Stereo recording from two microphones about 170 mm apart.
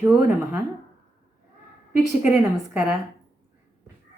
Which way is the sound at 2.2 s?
5° right (ahead or behind).